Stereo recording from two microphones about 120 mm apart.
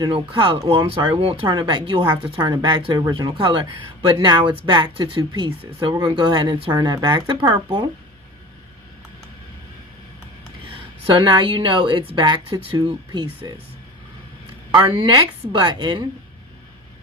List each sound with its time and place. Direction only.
0.0 s a woman's voice: 45° right (ahead or behind)
10.7 s a woman's voice: 45° right (ahead or behind)
14.8 s speech: 45° right (ahead or behind)